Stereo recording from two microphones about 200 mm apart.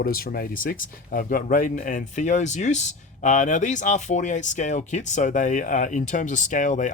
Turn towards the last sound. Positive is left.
turn(degrees=40)  # may be behind; listen again after turning